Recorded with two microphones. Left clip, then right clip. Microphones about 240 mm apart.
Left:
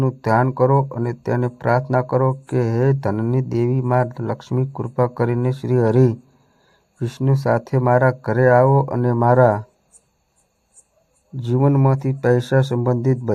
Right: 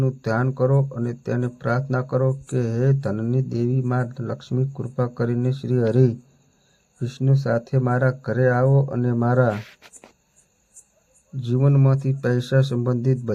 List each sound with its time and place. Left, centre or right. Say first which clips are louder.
0.0 s speech: left 6 dB; left
11.4 s speech: left 5 dB; left